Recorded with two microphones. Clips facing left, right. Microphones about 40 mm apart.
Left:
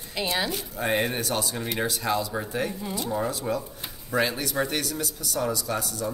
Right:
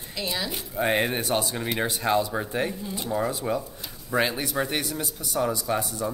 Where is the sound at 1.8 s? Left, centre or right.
Right.